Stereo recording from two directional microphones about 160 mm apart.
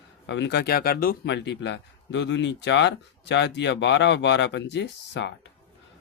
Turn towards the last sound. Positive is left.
turn(degrees=90)